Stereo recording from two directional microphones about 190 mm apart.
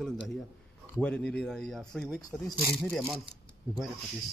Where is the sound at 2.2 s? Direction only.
20° left (ahead or behind).